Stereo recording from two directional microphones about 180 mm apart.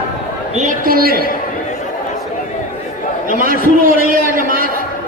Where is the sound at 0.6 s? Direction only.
50° right (ahead or behind).